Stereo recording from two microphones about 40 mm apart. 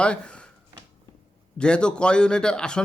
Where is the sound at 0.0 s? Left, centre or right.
Left.